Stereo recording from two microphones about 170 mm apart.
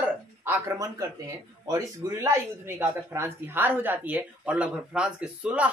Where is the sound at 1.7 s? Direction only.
15° right (ahead or behind).